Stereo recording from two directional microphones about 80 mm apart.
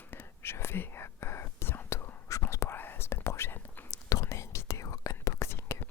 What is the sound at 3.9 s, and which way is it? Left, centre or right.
Whispering, left.